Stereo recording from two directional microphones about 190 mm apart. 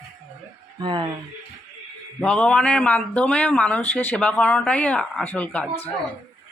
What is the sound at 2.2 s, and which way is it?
Speech, 5° left (ahead or behind).